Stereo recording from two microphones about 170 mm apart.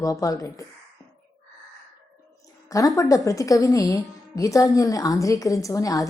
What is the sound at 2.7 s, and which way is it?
A woman's voice, 20° left (ahead or behind).